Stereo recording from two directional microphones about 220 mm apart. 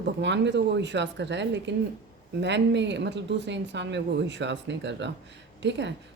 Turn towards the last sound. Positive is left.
turn(degrees=-55)  # may be behind; listen again after turning